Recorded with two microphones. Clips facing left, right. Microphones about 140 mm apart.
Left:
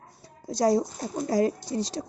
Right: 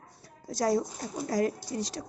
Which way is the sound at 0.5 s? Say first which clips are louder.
Left 4 dB; 20° left (ahead or behind).